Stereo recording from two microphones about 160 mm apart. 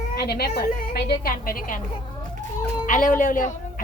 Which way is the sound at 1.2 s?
60° left (ahead or behind).